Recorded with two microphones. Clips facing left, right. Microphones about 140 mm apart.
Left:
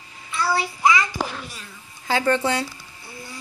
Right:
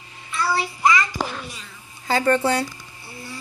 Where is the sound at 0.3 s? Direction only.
5° left (ahead or behind).